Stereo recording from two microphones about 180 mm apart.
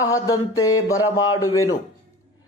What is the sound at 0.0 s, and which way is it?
A man's voice, 20° left (ahead or behind).